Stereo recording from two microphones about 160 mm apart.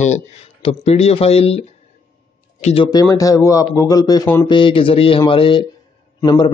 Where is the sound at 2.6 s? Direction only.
40° left (ahead or behind).